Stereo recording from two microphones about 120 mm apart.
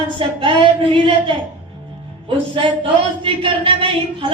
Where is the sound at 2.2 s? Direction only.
45° right (ahead or behind).